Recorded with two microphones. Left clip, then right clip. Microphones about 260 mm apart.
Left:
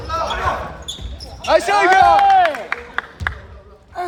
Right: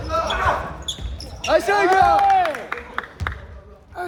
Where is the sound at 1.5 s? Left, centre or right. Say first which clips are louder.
Left 4 dB; left.